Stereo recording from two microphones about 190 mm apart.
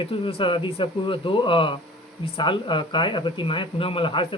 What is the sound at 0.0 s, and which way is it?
Speech, 30° left (ahead or behind).